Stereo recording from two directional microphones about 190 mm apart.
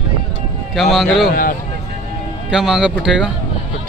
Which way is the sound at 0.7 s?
Centre (ahead or behind).